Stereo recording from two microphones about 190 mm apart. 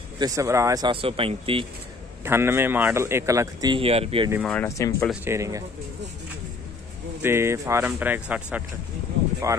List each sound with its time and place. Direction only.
0.2 s speech: 15° right (ahead or behind)
2.2 s speech: 10° right (ahead or behind); by 4.3 s 30° right (ahead or behind)
4.5 s speech: 10° left (ahead or behind)
5.2 s speech: 15° right (ahead or behind)
7.2 s speech: 15° right (ahead or behind)